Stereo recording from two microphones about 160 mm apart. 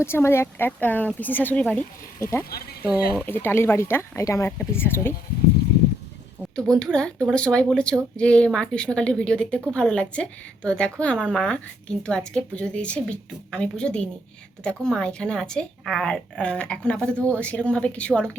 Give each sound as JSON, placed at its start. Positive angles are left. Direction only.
{"t": 0.0, "sound": "speech", "side_deg": 15}
{"t": 6.7, "sound": "speech", "side_deg": 5}